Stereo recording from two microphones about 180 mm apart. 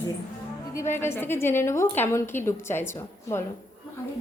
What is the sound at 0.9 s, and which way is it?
A woman's voice, 15° left (ahead or behind).